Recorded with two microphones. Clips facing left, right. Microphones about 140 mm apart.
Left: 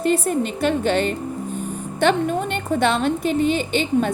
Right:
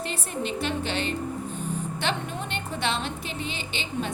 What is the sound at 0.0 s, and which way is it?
Speech, 45° left (ahead or behind).